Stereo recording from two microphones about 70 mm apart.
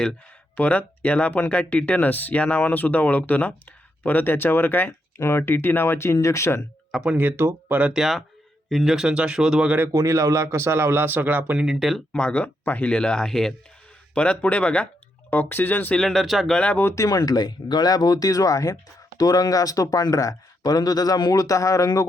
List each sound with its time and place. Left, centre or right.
0.5 s speech: left
7.0 s speech: right
7.9 s speech: centre
9.9 s a man's voice: right
11.6 s speech: centre
12.1 s speech: centre
14.1 s speech: centre
16.0 s speech: centre
16.9 s speech: left
17.2 s speech: left